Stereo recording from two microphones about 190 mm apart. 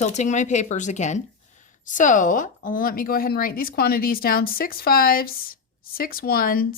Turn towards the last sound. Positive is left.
turn(degrees=50)  # may be behind; listen again after turning